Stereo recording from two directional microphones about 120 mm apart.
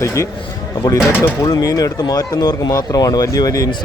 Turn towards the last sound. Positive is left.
turn(degrees=30)  # may be behind; listen again after turning